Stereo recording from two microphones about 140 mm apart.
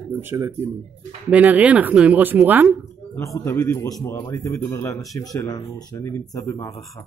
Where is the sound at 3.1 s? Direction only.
25° left (ahead or behind).